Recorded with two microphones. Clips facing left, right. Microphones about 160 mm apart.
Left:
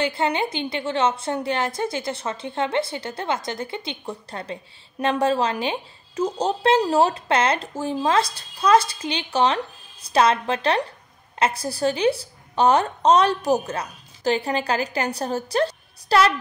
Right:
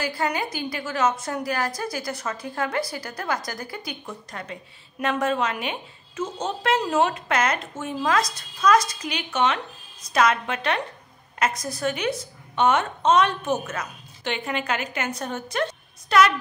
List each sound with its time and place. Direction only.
0.0 s a woman's voice: 25° left (ahead or behind)